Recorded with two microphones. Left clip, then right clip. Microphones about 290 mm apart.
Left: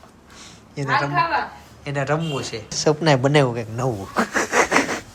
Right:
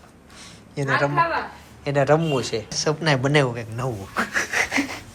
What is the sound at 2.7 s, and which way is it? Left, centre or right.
A woman's voice, centre.